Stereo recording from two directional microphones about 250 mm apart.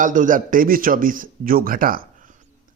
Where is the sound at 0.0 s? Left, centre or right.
Right.